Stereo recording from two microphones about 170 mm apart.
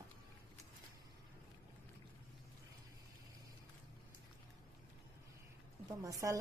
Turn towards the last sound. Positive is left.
turn(degrees=-20)  # may be behind; listen again after turning